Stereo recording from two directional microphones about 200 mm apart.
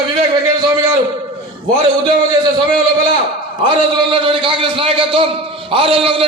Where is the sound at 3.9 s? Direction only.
25° right (ahead or behind).